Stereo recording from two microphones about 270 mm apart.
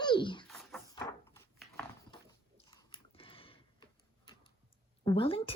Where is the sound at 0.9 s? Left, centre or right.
Centre.